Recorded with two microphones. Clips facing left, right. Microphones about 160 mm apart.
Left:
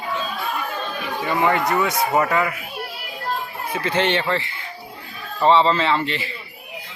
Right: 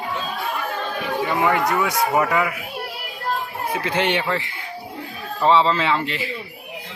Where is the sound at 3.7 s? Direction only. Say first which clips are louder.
Left 1 dB; 10° right (ahead or behind).